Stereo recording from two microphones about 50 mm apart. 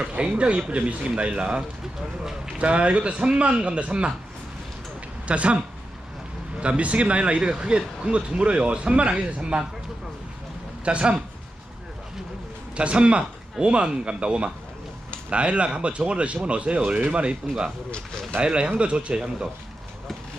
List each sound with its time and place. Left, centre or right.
0.0 s speech: right
4.9 s a sound: right
6.6 s speech: right
10.8 s speech: right
12.7 s speech: right
18.3 s speech: right